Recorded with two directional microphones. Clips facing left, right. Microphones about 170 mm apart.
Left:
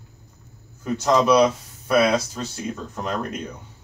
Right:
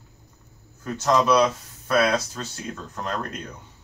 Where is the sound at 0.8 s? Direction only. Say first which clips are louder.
Left 2 dB; 10° left (ahead or behind).